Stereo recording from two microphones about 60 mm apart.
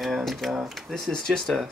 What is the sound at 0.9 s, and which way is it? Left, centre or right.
Speech, centre.